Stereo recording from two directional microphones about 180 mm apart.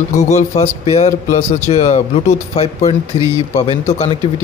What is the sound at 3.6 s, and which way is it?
Speech, 35° left (ahead or behind).